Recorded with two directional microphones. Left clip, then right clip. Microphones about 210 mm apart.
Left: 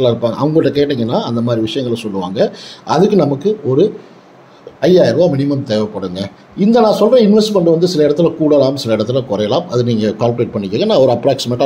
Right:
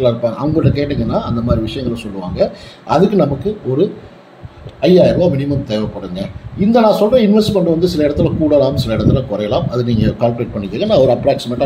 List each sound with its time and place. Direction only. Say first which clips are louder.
0.0 s a man's voice: left 1 dB; 35° left (ahead or behind)